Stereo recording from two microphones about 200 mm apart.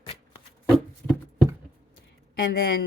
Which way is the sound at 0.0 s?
25° left (ahead or behind).